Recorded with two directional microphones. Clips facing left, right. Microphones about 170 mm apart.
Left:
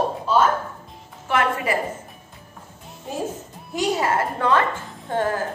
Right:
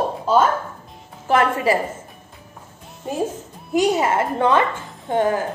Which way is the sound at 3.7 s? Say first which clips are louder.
Right 4 dB; 20° right (ahead or behind).